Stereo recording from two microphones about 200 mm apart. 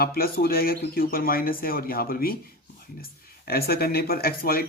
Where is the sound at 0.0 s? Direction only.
50° left (ahead or behind).